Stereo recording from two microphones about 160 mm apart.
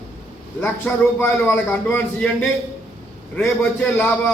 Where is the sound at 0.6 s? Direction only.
10° left (ahead or behind).